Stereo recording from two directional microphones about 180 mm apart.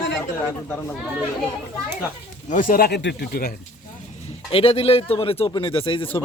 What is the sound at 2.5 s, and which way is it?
Speech, 50° left (ahead or behind).